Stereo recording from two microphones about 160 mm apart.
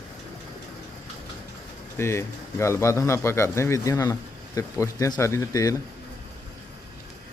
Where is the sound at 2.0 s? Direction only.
15° left (ahead or behind).